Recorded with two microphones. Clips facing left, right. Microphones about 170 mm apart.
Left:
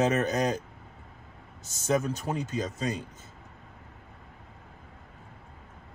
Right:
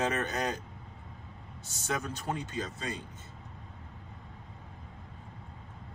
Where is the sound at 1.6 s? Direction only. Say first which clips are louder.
Left 8 dB; 40° left (ahead or behind).